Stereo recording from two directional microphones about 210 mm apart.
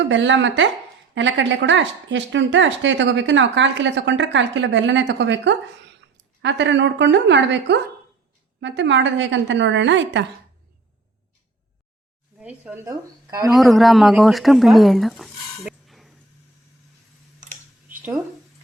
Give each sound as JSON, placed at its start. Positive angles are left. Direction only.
{"t": 0.1, "sound": "speech", "side_deg": -60}
{"t": 12.4, "sound": "a woman's voice", "side_deg": -5}
{"t": 13.5, "sound": "speech", "side_deg": 0}
{"t": 17.4, "sound": "a sound", "side_deg": -10}